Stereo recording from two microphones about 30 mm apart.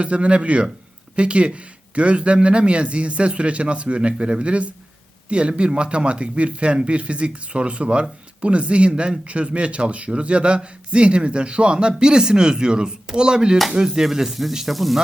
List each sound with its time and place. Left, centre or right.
0.0 s speech: right
13.7 s speech: centre
14.7 s speech: centre